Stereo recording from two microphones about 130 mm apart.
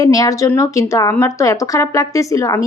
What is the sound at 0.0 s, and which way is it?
Speech, 25° left (ahead or behind).